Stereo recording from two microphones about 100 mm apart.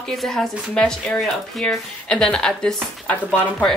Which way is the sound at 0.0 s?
Centre (ahead or behind).